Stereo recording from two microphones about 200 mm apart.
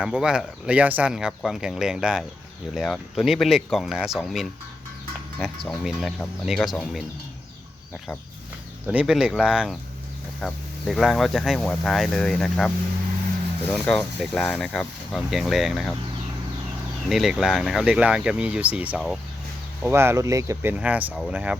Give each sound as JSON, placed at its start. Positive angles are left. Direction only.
{"t": 0.0, "sound": "speech", "side_deg": -5}
{"t": 8.9, "sound": "speech", "side_deg": -5}
{"t": 17.1, "sound": "speech", "side_deg": 0}
{"t": 19.8, "sound": "speech", "side_deg": -10}